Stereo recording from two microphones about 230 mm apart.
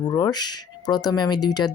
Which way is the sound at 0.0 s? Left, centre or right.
Centre.